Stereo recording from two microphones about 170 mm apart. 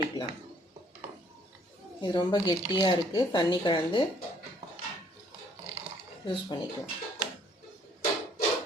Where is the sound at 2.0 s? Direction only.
25° left (ahead or behind).